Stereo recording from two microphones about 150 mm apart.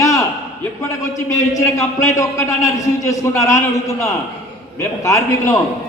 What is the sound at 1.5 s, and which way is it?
A man's voice, 20° left (ahead or behind).